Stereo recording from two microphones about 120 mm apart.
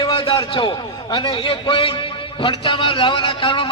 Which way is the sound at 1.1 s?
45° left (ahead or behind).